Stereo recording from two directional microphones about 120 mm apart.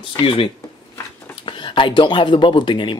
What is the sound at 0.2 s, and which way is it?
Speech, 45° left (ahead or behind).